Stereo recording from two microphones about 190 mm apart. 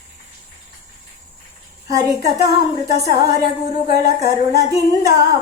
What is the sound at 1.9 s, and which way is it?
A woman's voice, 20° right (ahead or behind).